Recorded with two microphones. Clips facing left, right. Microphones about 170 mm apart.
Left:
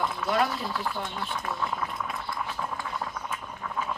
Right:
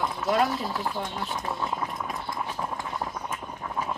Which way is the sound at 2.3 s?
20° right (ahead or behind).